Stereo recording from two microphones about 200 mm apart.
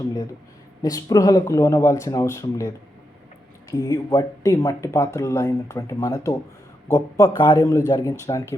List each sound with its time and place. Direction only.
0.8 s speech: 15° left (ahead or behind)